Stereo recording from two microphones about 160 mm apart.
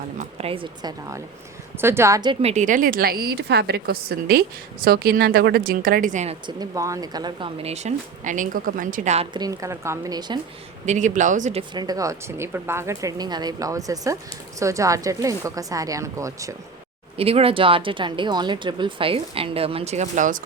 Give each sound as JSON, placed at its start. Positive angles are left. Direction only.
{"t": 0.2, "sound": "a woman's voice", "side_deg": -40}
{"t": 2.4, "sound": "a woman's voice", "side_deg": -45}
{"t": 6.4, "sound": "speech", "side_deg": -25}
{"t": 9.3, "sound": "a woman's voice", "side_deg": -25}
{"t": 10.8, "sound": "speech", "side_deg": -50}
{"t": 11.7, "sound": "a woman's voice", "side_deg": -25}
{"t": 17.2, "sound": "speech", "side_deg": -35}